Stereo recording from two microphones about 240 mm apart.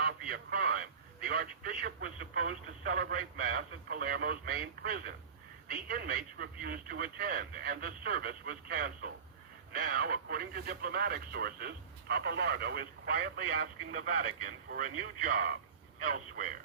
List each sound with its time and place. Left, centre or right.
0.0 s speech: right